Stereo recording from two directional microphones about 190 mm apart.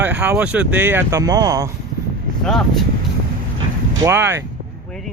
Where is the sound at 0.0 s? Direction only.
10° right (ahead or behind).